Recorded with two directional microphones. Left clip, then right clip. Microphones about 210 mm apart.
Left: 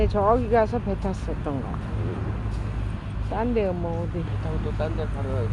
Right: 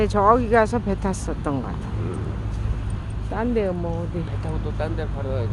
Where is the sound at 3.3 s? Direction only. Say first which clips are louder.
Right 1 dB; 15° right (ahead or behind).